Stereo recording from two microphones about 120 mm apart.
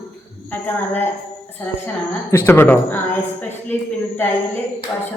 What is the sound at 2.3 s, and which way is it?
A woman's voice, 20° left (ahead or behind).